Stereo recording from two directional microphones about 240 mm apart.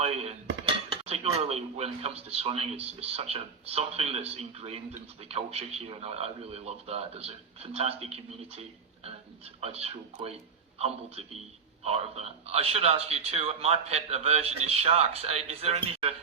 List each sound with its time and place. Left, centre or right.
0.0 s speech: right